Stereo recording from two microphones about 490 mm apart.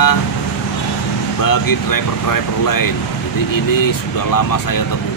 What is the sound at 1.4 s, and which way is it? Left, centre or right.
Speech, left.